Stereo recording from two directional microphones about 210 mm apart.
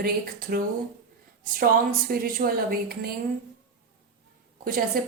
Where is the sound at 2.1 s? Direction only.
45° right (ahead or behind).